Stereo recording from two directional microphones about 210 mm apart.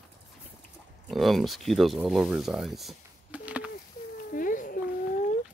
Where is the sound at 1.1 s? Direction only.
Centre (ahead or behind).